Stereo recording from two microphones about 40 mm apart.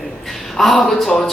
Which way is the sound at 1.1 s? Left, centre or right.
Centre.